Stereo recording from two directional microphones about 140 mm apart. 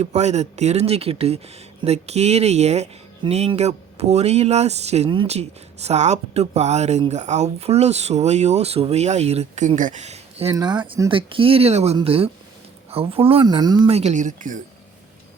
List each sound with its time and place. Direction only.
0.0 s speech: 55° right (ahead or behind)
5.0 s speech: 35° right (ahead or behind)
5.3 s speech: 50° right (ahead or behind)
10.5 s speech: 30° right (ahead or behind)
13.9 s speech: 55° right (ahead or behind)